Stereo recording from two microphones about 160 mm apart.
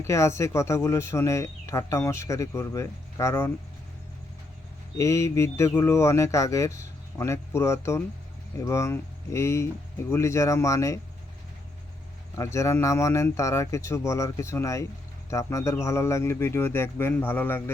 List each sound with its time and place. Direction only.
0.0 s speech: 15° left (ahead or behind)
4.9 s speech: 20° left (ahead or behind)
12.4 s speech: 20° left (ahead or behind)